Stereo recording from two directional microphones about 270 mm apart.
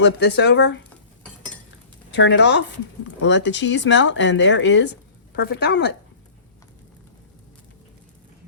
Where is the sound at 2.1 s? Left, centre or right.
Left.